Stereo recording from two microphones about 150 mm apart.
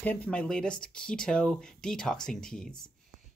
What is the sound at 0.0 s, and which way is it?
Speech, 10° left (ahead or behind).